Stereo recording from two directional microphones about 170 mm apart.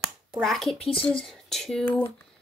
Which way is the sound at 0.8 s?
30° left (ahead or behind).